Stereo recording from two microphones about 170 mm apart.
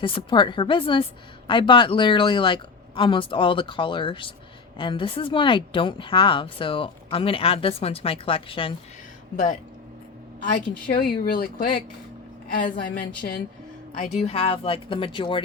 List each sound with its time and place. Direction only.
0.0 s speech: 30° left (ahead or behind)
9.3 s a woman's voice: 45° left (ahead or behind)
10.9 s a woman's voice: 60° left (ahead or behind)
13.9 s speech: 40° left (ahead or behind)